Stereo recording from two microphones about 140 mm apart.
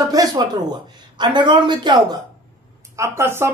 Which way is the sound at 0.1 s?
25° right (ahead or behind).